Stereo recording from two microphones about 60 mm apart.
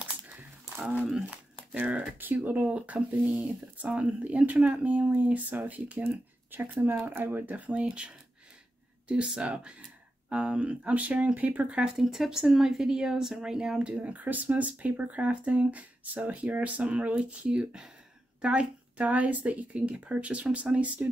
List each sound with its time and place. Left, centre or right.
0.0 s a sound: right
1.7 s speech: right
11.8 s speech: centre; by 21.1 s right